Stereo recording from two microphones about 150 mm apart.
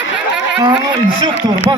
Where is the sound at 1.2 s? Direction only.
30° right (ahead or behind).